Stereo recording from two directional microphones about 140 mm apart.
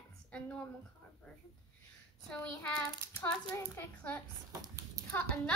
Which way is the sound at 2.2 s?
10° left (ahead or behind).